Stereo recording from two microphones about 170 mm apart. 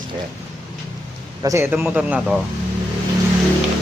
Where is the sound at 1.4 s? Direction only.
15° right (ahead or behind).